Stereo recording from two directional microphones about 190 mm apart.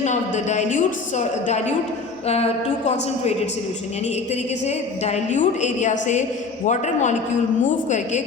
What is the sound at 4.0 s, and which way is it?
A woman's voice, 35° left (ahead or behind).